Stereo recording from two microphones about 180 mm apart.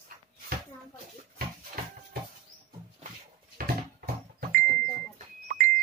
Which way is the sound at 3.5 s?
55° right (ahead or behind).